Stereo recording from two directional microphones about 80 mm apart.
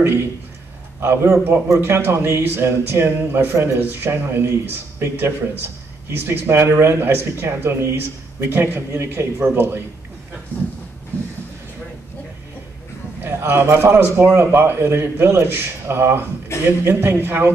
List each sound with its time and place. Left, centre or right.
1.0 s a man's voice: right
13.2 s a man's voice: right